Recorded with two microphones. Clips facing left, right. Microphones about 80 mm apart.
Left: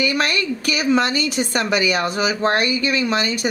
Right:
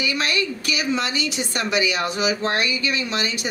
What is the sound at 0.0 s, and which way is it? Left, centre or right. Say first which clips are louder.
A woman's voice: left 3 dB; left.